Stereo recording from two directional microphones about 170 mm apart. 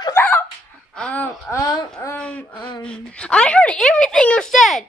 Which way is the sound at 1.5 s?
20° left (ahead or behind).